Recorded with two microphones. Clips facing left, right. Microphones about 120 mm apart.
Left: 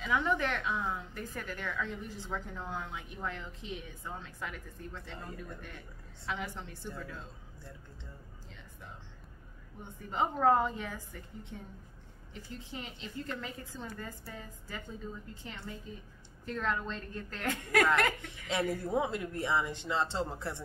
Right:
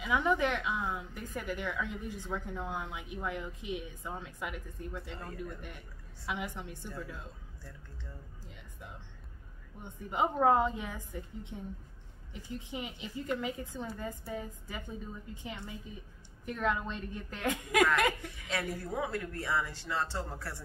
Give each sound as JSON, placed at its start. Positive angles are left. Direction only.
{"t": 0.0, "sound": "a woman's voice", "side_deg": -15}
{"t": 10.0, "sound": "a woman's voice", "side_deg": -15}
{"t": 18.5, "sound": "speech", "side_deg": 20}